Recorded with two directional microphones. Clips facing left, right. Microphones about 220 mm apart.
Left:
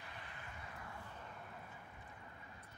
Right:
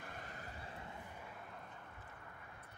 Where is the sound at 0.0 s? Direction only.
45° right (ahead or behind); by 1.0 s 25° right (ahead or behind).